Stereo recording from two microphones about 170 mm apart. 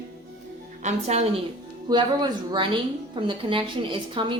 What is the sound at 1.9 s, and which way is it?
A woman's voice, 25° right (ahead or behind).